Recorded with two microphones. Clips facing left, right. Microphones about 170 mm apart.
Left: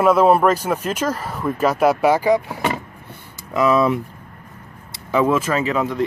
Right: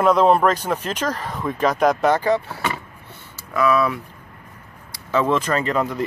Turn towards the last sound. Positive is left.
turn(degrees=0)  # may be behind; listen again after turning